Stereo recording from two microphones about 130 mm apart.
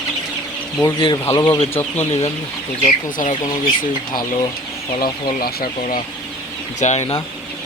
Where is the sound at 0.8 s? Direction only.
35° left (ahead or behind).